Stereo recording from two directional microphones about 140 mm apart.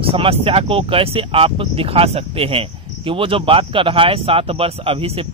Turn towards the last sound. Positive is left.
turn(degrees=-45)  # may be behind; listen again after turning